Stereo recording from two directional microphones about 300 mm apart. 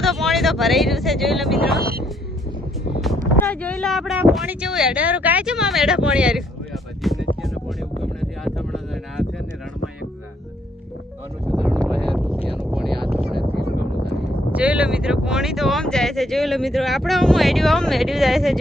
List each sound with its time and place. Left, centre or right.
0.0 s speech: centre
1.8 s speech: right
3.0 s speech: centre
7.0 s music: centre
7.4 s wind noise: centre
11.5 s vehicle: centre
14.5 s speech: centre